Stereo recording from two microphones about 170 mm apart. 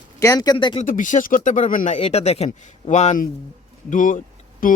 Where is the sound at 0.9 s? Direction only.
50° left (ahead or behind).